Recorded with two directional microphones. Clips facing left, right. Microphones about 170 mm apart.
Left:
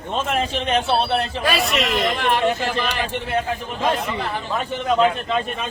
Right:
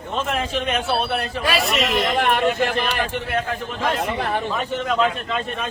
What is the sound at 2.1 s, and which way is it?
Speech, 55° right (ahead or behind).